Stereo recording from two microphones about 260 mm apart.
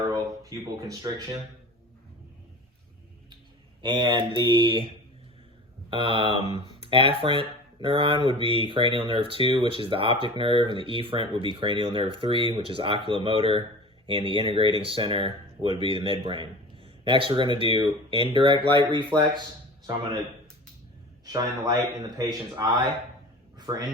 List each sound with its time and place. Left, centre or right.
0.8 s speech: centre
3.8 s speech: centre
21.2 s speech: centre
23.6 s a sound: centre